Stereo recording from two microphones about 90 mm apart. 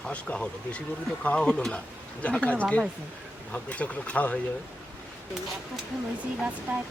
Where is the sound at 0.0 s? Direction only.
10° left (ahead or behind).